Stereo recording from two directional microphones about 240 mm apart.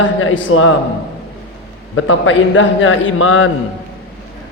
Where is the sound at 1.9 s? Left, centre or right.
Left.